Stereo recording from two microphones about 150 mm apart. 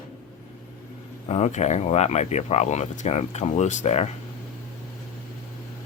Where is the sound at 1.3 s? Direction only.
50° left (ahead or behind).